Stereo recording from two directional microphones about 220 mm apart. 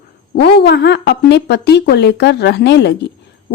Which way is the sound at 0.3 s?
50° left (ahead or behind).